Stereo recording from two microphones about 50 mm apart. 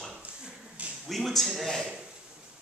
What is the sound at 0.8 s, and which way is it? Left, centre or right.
Speech, right.